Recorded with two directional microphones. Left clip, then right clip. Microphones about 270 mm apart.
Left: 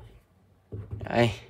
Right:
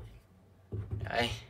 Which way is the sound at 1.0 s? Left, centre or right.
Left.